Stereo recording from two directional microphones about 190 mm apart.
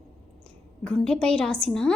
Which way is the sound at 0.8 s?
5° left (ahead or behind).